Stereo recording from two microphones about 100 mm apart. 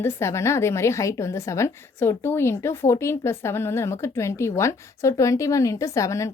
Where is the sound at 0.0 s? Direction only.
30° left (ahead or behind).